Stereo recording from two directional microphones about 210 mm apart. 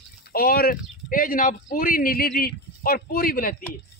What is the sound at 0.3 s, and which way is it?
A man's voice, 45° left (ahead or behind).